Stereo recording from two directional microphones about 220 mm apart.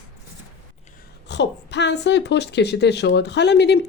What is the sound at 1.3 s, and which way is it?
A woman's voice, 50° left (ahead or behind).